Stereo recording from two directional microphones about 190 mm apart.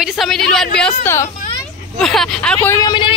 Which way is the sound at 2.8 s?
25° left (ahead or behind).